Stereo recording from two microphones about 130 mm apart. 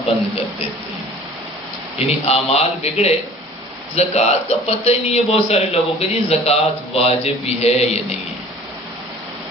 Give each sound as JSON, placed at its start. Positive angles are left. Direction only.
{"t": 2.0, "sound": "a man's voice", "side_deg": 50}